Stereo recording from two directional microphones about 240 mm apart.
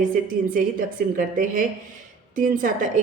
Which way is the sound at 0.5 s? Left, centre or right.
Right.